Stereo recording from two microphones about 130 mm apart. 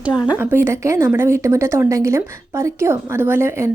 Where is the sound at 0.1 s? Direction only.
35° left (ahead or behind).